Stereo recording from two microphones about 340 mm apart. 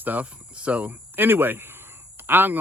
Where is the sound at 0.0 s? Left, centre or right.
Centre.